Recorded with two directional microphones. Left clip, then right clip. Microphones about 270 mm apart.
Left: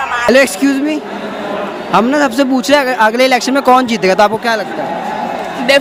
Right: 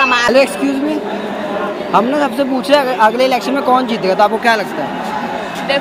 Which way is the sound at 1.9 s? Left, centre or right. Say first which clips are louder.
Left 3 dB; left.